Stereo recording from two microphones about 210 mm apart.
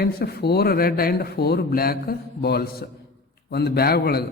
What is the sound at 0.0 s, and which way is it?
A man's voice, 45° left (ahead or behind).